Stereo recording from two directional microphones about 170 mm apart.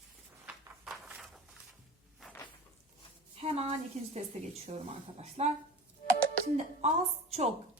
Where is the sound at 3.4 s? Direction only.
35° right (ahead or behind).